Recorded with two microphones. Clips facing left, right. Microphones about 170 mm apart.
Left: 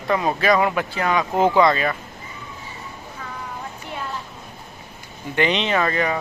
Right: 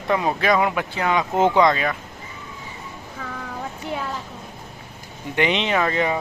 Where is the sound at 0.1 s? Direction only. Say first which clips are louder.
Left 1 dB; 5° right (ahead or behind).